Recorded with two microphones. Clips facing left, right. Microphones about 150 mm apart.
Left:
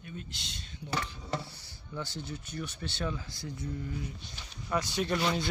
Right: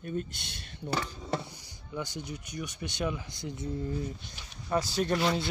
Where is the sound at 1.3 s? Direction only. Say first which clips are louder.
Left 2 dB; 15° right (ahead or behind).